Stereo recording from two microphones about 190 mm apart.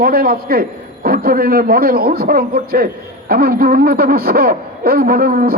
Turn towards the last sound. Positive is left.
turn(degrees=-50)  # may be behind; listen again after turning